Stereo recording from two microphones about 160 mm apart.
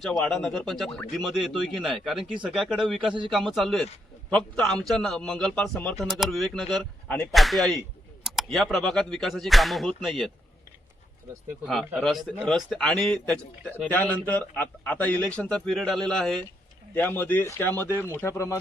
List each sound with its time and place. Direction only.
0.0 s a man's voice: centre (ahead or behind)
11.6 s a man's voice: centre (ahead or behind); by 18.5 s 15° left (ahead or behind)